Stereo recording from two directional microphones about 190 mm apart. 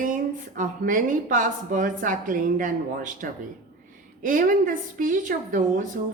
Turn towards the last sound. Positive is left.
turn(degrees=-45)  # may be behind; listen again after turning